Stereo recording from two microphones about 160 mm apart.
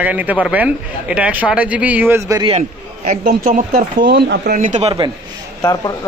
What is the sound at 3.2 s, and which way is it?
Speech, 65° right (ahead or behind).